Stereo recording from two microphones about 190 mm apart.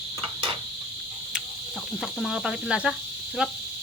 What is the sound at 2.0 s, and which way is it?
Speech, centre (ahead or behind).